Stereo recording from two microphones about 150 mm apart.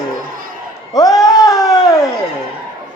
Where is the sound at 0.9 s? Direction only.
25° left (ahead or behind).